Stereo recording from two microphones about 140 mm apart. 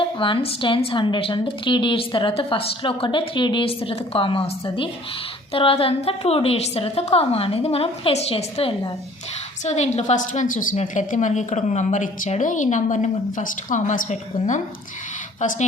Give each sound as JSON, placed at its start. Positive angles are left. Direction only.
{"t": 0.0, "sound": "a woman's voice", "side_deg": 35}
{"t": 10.8, "sound": "speech", "side_deg": 60}